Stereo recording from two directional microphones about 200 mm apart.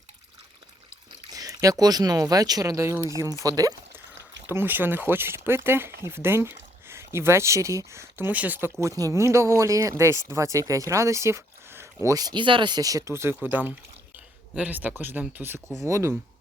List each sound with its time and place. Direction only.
1.3 s speech: 20° right (ahead or behind)